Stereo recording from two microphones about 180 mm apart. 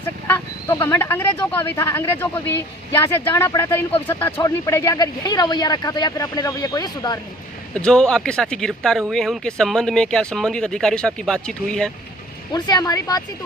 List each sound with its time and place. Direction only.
0.3 s speech: 10° left (ahead or behind)
7.8 s speech: 5° left (ahead or behind)
12.5 s speech: 25° left (ahead or behind)